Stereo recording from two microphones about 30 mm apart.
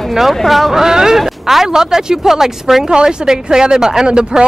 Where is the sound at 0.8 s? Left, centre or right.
Centre.